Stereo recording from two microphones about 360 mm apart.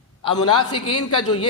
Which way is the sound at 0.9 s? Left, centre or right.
Left.